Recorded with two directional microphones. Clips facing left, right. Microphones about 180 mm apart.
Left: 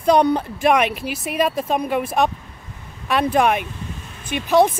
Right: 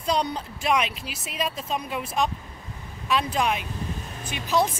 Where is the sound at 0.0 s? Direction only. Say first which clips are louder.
Left 10 dB; 55° left (ahead or behind).